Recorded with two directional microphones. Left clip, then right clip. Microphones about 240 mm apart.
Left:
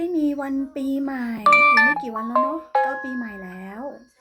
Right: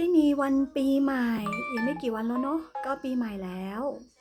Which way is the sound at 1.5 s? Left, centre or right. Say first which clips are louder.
Left 17 dB; left.